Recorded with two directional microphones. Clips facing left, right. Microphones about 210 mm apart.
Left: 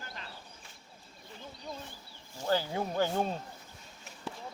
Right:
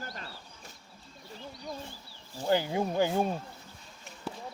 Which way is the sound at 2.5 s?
15° right (ahead or behind).